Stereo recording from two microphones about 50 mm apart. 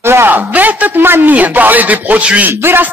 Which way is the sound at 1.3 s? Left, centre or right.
Right.